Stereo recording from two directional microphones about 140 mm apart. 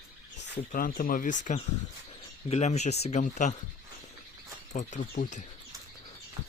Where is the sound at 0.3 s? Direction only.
80° left.